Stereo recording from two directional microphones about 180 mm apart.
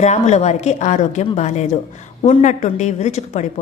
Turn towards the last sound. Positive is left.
turn(degrees=40)  # may be behind; listen again after turning